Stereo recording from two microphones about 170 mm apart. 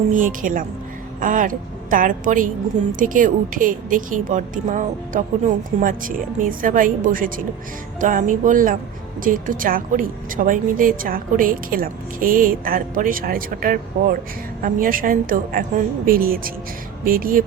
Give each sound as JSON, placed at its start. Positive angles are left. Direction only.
{"t": 0.1, "sound": "a woman's voice", "side_deg": -50}